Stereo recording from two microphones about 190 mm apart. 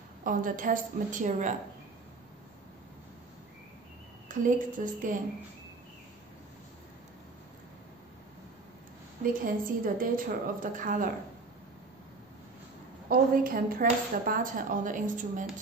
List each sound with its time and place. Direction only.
0.2 s speech: 45° right (ahead or behind)
4.3 s speech: 45° right (ahead or behind)
9.2 s speech: 45° right (ahead or behind)
13.1 s speech: 50° right (ahead or behind)